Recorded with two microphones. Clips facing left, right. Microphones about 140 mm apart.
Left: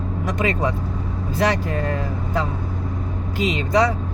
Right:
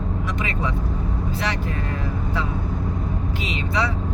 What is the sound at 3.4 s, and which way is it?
Speech, 40° left (ahead or behind).